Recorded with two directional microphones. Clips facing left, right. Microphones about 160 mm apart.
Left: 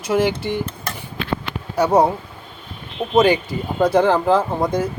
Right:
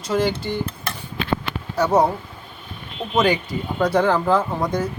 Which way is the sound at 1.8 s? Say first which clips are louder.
Left 2 dB; 15° left (ahead or behind).